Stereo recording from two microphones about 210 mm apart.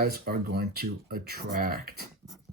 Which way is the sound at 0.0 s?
45° right (ahead or behind).